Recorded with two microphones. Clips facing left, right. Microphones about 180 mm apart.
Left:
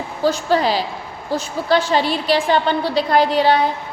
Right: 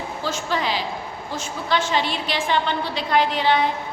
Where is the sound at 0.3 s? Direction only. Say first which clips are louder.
Left 8 dB; 35° left (ahead or behind).